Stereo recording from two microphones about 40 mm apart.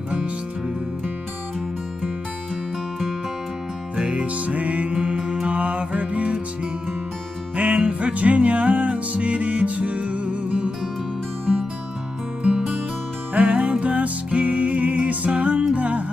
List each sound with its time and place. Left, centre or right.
3.9 s music: right
7.5 s music: right
13.3 s music: right